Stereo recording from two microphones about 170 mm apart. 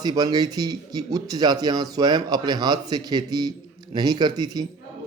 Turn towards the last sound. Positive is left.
turn(degrees=-25)  # may be behind; listen again after turning